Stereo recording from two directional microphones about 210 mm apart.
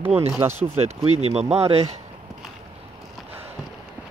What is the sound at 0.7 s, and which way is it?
Speech, 30° right (ahead or behind).